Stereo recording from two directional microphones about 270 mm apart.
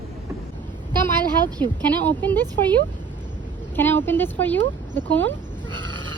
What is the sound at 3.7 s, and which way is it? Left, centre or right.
A woman's voice, centre.